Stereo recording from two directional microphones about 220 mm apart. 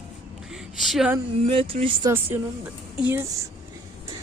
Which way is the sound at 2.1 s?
10° right (ahead or behind).